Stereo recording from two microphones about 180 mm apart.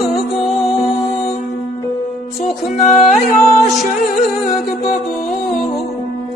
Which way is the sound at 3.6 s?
Centre (ahead or behind).